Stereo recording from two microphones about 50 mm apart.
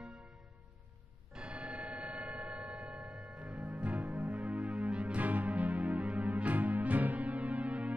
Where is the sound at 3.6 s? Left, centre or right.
Right.